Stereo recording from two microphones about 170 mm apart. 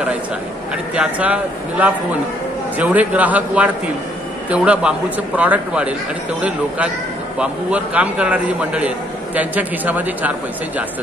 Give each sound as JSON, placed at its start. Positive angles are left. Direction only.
{"t": 0.9, "sound": "a man's voice", "side_deg": -10}
{"t": 7.3, "sound": "a man's voice", "side_deg": -5}